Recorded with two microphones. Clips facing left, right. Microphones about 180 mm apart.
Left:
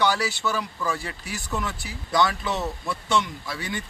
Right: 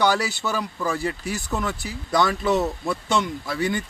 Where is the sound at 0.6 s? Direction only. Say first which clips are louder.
Right 3 dB; 40° right (ahead or behind).